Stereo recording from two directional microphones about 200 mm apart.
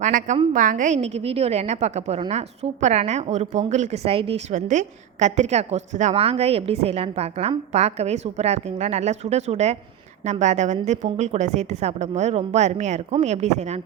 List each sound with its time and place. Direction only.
0.0 s a woman's voice: 40° right (ahead or behind)